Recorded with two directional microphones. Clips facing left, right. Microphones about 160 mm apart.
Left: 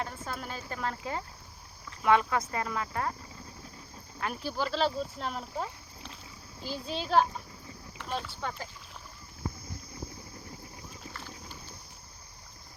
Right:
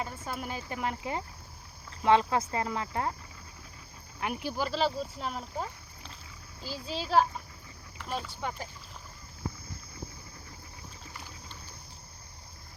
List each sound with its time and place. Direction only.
0.0 s speech: 10° right (ahead or behind)
4.2 s speech: 15° right (ahead or behind)
7.9 s boat: 5° right (ahead or behind)
8.4 s speech: 15° right (ahead or behind)